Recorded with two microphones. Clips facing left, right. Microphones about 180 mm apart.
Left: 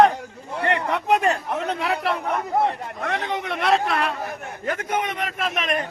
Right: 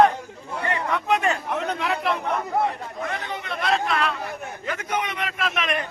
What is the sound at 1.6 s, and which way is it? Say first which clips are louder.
Speech: left 1 dB; 35° left (ahead or behind).